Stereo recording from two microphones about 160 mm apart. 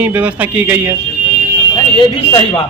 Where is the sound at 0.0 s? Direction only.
10° right (ahead or behind).